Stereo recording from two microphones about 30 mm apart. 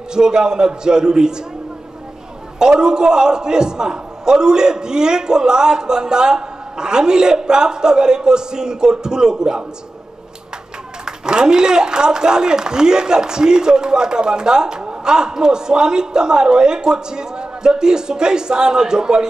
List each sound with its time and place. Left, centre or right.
0.1 s a man's voice: right
2.6 s a man's voice: right
11.1 s a man's voice: right
14.8 s a sound: right
15.1 s a man's voice: right